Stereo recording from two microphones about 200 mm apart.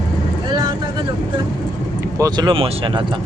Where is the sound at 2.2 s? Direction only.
20° right (ahead or behind).